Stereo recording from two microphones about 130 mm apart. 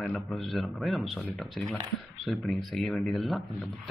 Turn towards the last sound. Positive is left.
turn(degrees=0)  # may be behind; listen again after turning